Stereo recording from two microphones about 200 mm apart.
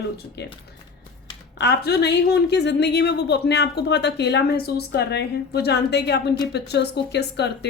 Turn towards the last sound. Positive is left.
turn(degrees=55)  # may be behind; listen again after turning